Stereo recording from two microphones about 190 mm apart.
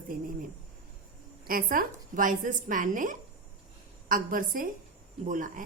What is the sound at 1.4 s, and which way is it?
A woman's voice, 50° right (ahead or behind).